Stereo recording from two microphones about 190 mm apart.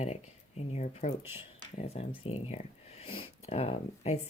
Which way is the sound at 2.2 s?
35° left (ahead or behind).